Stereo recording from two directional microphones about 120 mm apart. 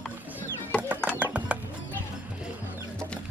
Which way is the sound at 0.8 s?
15° right (ahead or behind).